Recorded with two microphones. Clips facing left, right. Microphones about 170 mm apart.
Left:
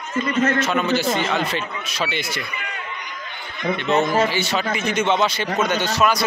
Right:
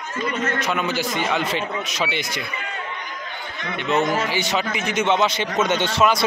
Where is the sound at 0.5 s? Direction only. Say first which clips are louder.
Left 3 dB; 15° right (ahead or behind).